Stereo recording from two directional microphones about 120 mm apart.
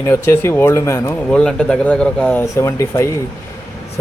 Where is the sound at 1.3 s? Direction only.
5° left (ahead or behind).